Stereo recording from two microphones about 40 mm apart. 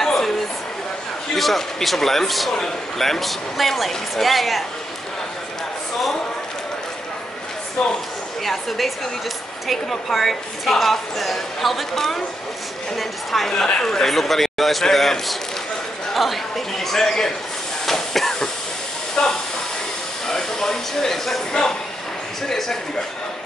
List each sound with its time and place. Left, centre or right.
0.0 s a sound: centre
1.3 s a woman's voice: centre
8.5 s a woman's voice: centre
13.7 s speech: centre
14.0 s a woman's voice: centre
17.8 s train: centre
19.2 s speech: centre